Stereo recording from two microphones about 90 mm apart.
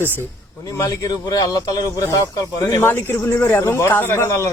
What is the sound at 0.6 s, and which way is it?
Speech, 40° left (ahead or behind).